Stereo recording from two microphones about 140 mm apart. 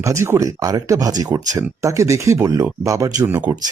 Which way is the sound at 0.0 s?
20° right (ahead or behind).